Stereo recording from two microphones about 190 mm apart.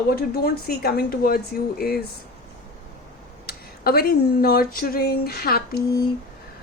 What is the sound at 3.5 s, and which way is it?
Speech, 55° left (ahead or behind).